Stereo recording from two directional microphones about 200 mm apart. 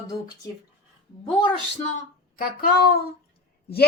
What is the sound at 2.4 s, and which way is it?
Speech, 50° left (ahead or behind).